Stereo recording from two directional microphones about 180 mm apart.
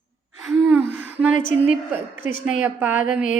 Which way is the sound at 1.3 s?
45° left (ahead or behind).